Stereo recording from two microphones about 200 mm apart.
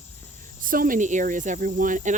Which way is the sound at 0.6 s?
45° right (ahead or behind).